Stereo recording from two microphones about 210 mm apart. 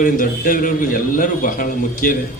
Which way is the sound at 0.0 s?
40° left (ahead or behind).